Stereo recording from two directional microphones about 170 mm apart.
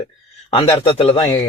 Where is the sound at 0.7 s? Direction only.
25° left (ahead or behind).